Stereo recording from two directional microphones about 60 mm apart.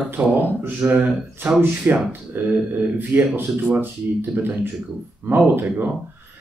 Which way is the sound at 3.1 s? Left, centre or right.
Right.